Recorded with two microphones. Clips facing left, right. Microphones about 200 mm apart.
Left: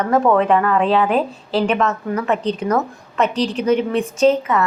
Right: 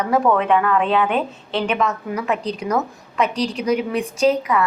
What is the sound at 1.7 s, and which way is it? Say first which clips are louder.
A woman's voice: left 3 dB; 10° right (ahead or behind).